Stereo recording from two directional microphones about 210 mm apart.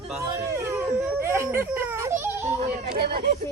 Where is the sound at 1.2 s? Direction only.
15° right (ahead or behind).